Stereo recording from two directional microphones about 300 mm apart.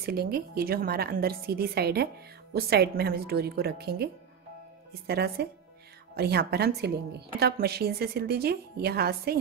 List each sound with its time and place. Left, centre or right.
0.0 s a woman's voice: right